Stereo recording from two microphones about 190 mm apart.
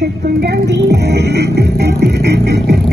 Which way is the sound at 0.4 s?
60° right (ahead or behind).